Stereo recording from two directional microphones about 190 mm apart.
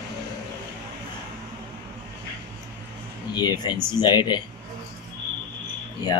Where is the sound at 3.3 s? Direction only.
20° left (ahead or behind).